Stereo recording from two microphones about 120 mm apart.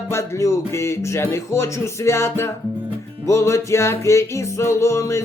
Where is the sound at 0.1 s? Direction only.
25° left (ahead or behind).